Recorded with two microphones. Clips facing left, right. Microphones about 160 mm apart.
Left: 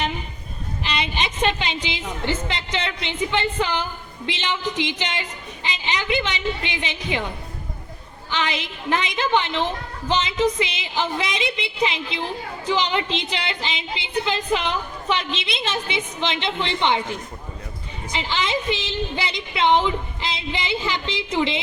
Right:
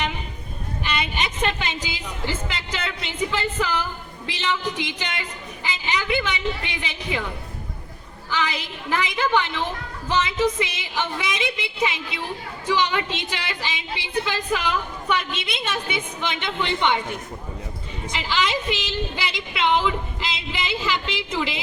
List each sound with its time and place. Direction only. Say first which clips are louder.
1.0 s a woman's voice: left 5 dB; 25° left (ahead or behind)
8.3 s a woman's voice: left 1 dB; 25° left (ahead or behind)